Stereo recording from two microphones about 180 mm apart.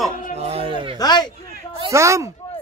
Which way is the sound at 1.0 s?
20° left (ahead or behind).